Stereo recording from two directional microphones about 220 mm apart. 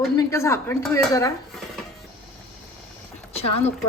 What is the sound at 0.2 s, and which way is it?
Speech, 15° left (ahead or behind).